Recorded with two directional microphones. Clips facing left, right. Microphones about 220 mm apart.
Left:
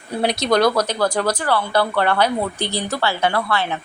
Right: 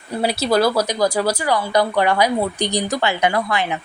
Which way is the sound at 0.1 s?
5° right (ahead or behind).